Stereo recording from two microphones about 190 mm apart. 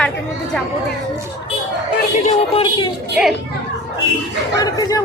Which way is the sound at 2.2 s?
30° left (ahead or behind).